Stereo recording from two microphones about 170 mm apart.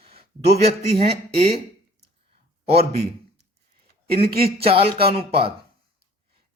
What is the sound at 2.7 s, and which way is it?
Speech, 35° right (ahead or behind).